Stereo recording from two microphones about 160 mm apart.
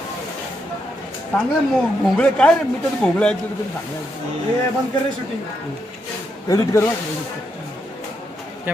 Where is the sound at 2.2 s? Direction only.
5° left (ahead or behind).